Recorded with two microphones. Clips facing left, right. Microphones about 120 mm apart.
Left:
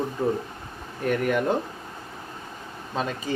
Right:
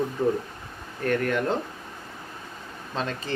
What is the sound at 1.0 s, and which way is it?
Speech, 5° left (ahead or behind).